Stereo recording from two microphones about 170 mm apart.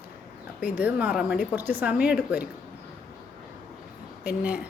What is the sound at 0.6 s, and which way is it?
Speech, 10° right (ahead or behind).